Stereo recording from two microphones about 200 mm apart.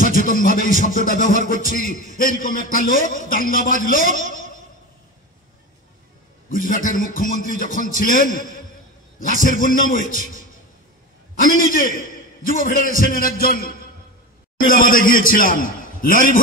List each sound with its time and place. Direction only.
0.0 s a man's voice: 45° left (ahead or behind)
1.9 s a man's voice: 35° right (ahead or behind)
2.7 s a man's voice: 45° left (ahead or behind)
4.2 s a sound: 40° left (ahead or behind)
6.5 s a man's voice: 40° left (ahead or behind)
11.3 s a man's voice: 40° left (ahead or behind)